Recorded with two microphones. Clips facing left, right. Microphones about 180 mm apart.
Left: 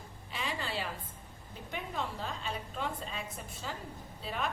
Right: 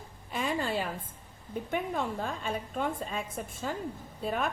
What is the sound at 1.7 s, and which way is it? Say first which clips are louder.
A woman's voice: right 6 dB; 50° right (ahead or behind).